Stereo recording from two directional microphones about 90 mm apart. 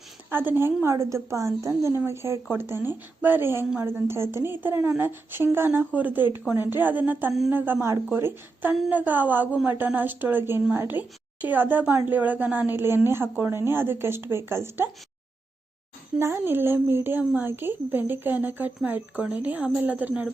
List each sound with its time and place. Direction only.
0.3 s a woman's voice: 25° right (ahead or behind)
16.1 s a woman's voice: 25° right (ahead or behind)